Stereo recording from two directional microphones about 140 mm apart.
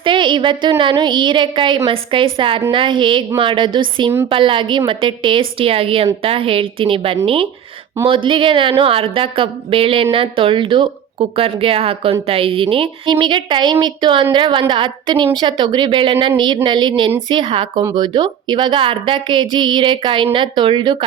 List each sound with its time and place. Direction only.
0.0 s a woman's voice: 35° right (ahead or behind)